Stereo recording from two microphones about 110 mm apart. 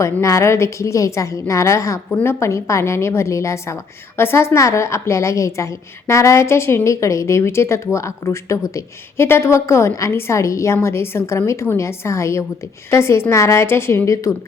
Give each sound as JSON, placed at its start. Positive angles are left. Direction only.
{"t": 0.0, "sound": "a woman's voice", "side_deg": 30}